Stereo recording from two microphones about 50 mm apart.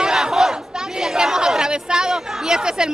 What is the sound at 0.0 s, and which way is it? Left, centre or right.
Battle cry, centre.